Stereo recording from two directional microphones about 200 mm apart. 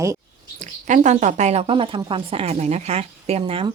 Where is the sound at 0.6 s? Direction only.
40° right (ahead or behind).